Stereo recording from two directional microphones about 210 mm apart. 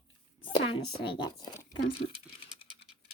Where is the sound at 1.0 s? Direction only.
25° left (ahead or behind).